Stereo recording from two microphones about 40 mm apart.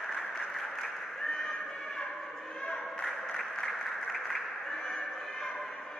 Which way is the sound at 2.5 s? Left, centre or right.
Left.